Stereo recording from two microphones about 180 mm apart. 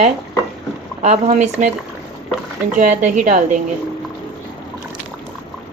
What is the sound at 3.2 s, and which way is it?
Speech, 45° right (ahead or behind).